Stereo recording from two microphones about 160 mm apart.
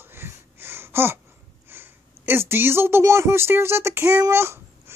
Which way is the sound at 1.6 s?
15° right (ahead or behind).